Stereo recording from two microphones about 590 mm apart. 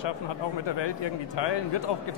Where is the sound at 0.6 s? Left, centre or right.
Left.